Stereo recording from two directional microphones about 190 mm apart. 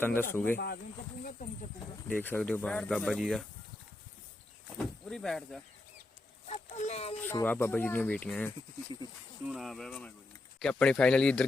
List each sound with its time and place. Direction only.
0.0 s speech: 10° left (ahead or behind)
0.5 s speech: 55° left (ahead or behind)
2.0 s speech: 10° left (ahead or behind)
4.8 s speech: 5° left (ahead or behind)
6.5 s speech: 35° left (ahead or behind)
7.2 s speech: 10° left (ahead or behind)